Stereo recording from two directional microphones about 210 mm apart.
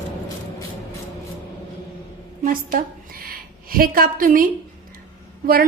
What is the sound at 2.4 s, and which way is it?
A woman's voice, 40° right (ahead or behind).